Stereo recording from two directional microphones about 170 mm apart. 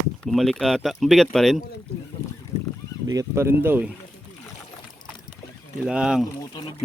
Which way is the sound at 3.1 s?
15° right (ahead or behind).